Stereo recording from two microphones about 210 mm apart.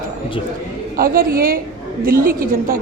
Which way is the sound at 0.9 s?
45° right (ahead or behind).